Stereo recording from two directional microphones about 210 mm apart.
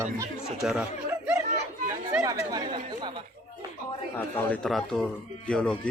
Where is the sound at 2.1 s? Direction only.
15° right (ahead or behind).